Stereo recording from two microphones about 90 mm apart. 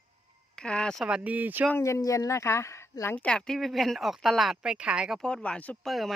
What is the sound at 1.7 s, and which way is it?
Speech, 35° left (ahead or behind).